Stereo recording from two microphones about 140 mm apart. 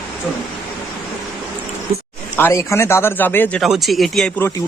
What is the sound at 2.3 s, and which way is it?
A man's voice, 20° left (ahead or behind).